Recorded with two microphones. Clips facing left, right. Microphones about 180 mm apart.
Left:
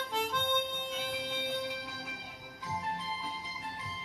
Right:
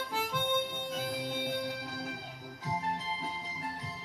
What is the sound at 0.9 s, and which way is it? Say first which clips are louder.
Music: right 2 dB; 40° right (ahead or behind).